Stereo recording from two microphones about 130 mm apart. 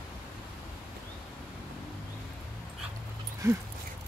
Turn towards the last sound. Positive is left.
turn(degrees=-25)  # may be behind; listen again after turning